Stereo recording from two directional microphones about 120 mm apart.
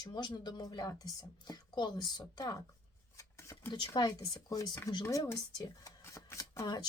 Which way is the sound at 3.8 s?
30° left (ahead or behind).